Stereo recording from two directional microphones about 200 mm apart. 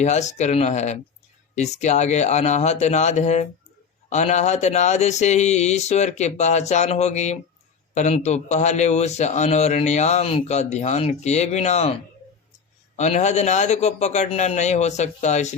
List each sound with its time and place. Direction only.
0.0 s a man's voice: 35° left (ahead or behind)
13.0 s a man's voice: 35° left (ahead or behind)